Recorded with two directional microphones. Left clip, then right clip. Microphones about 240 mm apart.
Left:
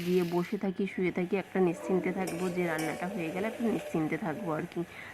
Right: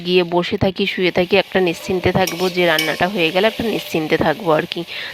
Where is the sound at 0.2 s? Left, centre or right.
Right.